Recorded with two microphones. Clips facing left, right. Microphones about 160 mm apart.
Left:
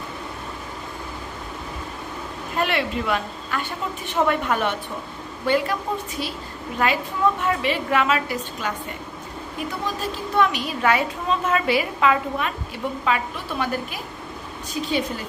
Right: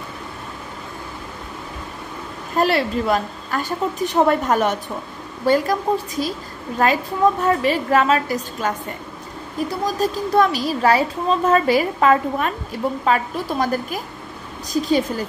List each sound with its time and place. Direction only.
2.5 s a woman's voice: 40° right (ahead or behind)